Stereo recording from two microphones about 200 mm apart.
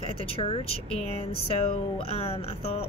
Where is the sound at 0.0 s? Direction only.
30° left (ahead or behind).